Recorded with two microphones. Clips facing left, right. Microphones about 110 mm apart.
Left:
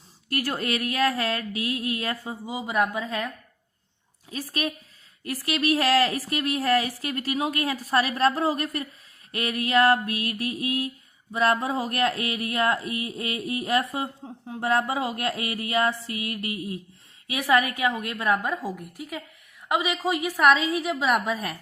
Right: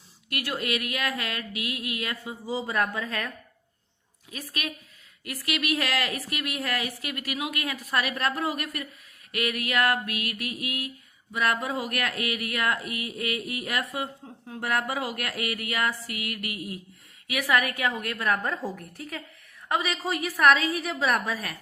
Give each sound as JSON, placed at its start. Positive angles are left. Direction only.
{"t": 0.3, "sound": "a woman's voice", "side_deg": 35}
{"t": 2.5, "sound": "speech", "side_deg": 15}
{"t": 4.3, "sound": "a woman's voice", "side_deg": 30}
{"t": 9.3, "sound": "a sound", "side_deg": 30}
{"t": 19.6, "sound": "a woman's voice", "side_deg": 15}
{"t": 20.1, "sound": "a sound", "side_deg": 15}